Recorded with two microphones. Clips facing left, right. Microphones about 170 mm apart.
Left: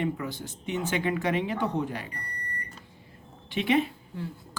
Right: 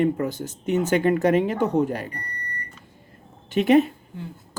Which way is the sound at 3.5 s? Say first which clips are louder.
Right 8 dB; 45° right (ahead or behind).